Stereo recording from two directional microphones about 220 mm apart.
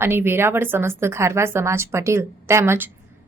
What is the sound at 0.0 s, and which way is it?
A woman's voice, 10° right (ahead or behind).